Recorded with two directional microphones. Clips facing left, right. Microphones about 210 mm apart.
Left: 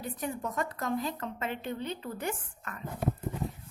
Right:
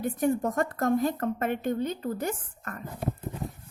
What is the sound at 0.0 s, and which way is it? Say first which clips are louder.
Speech: right 9 dB; 50° right (ahead or behind).